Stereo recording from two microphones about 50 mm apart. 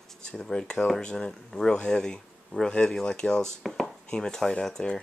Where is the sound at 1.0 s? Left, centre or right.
Centre.